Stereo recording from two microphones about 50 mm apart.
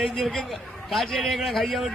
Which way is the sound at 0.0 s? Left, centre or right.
Centre.